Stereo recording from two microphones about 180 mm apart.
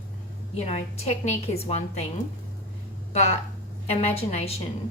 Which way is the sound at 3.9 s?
35° left (ahead or behind).